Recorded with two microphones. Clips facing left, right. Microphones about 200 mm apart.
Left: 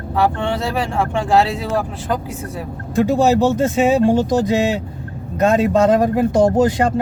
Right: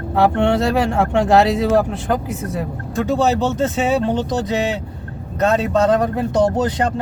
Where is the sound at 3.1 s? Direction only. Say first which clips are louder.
Left 2 dB; 15° left (ahead or behind).